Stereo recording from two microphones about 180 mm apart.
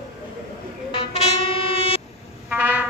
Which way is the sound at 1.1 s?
30° left (ahead or behind).